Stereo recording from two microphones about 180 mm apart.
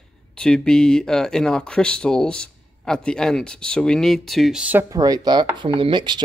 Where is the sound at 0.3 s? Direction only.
5° left (ahead or behind).